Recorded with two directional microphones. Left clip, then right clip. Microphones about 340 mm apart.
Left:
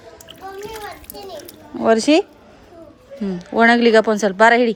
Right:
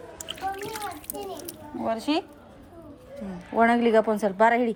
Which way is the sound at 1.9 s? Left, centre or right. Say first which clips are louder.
Left 12 dB; left.